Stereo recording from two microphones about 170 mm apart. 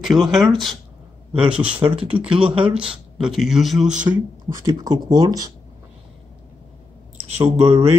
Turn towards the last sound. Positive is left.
turn(degrees=-35)  # may be behind; listen again after turning